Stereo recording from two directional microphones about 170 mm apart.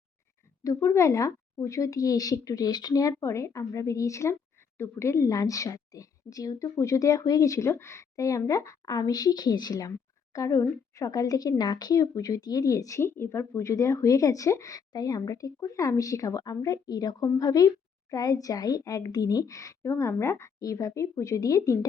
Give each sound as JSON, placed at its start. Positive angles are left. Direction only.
{"t": 0.6, "sound": "a woman's voice", "side_deg": 20}